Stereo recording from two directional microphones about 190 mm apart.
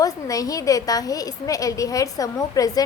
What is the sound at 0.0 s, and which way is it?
A woman's voice, 20° left (ahead or behind).